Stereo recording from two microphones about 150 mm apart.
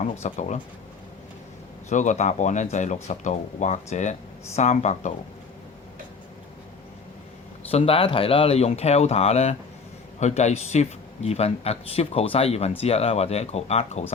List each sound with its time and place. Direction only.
0.0 s speech: 50° left (ahead or behind)
1.9 s speech: 55° left (ahead or behind)
7.7 s speech: 40° left (ahead or behind)